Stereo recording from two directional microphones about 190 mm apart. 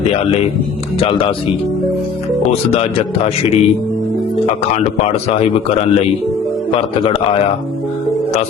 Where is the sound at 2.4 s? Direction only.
30° left (ahead or behind).